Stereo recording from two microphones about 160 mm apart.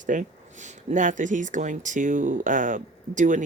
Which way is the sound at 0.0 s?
50° right (ahead or behind).